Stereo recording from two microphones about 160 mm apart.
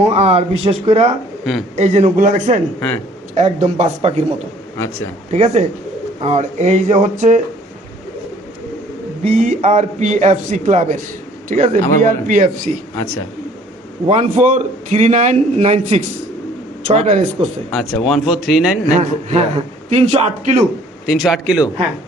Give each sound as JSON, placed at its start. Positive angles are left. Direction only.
{"t": 0.0, "sound": "a man's voice", "side_deg": -40}
{"t": 5.3, "sound": "a man's voice", "side_deg": -45}
{"t": 9.2, "sound": "a man's voice", "side_deg": -50}
{"t": 14.1, "sound": "a man's voice", "side_deg": -50}
{"t": 17.7, "sound": "speech", "side_deg": 5}
{"t": 18.9, "sound": "a man's voice", "side_deg": -45}
{"t": 21.1, "sound": "speech", "side_deg": 0}